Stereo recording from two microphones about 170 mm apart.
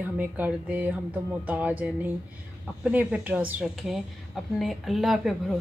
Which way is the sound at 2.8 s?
5° right (ahead or behind).